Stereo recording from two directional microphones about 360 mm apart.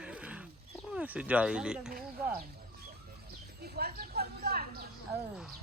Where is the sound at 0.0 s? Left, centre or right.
Centre.